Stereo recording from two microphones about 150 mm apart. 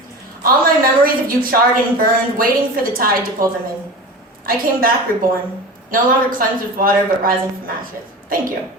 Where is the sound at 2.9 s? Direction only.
70° right (ahead or behind).